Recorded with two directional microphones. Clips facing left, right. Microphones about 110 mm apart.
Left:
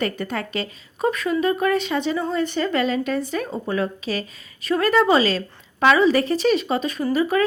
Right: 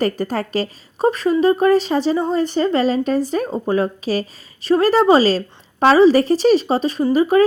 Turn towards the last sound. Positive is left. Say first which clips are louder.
# right 6 dB
turn(degrees=-30)  # may be behind; listen again after turning